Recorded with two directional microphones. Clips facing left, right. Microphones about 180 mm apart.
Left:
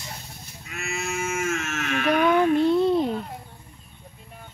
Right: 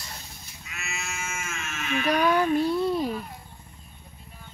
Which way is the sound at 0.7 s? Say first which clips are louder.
Left 7 dB; 55° left (ahead or behind).